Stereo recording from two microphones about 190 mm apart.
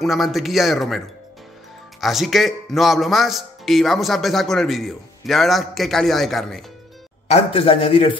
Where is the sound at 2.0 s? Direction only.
Centre (ahead or behind).